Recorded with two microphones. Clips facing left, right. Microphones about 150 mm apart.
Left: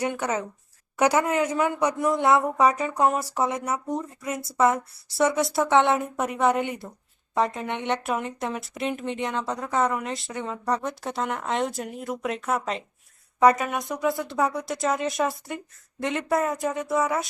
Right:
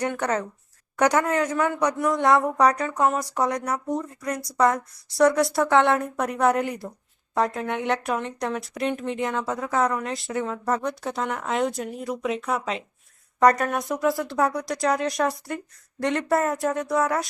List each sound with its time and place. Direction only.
0.0 s speech: 10° left (ahead or behind)
2.8 s speech: 15° left (ahead or behind)
3.2 s speech: 5° left (ahead or behind)